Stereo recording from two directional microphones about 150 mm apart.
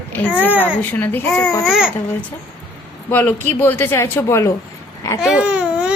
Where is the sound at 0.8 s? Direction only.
10° left (ahead or behind).